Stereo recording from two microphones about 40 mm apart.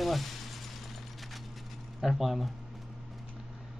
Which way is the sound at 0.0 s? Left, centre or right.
Centre.